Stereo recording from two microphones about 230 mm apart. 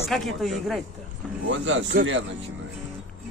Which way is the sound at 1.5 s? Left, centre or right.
Right.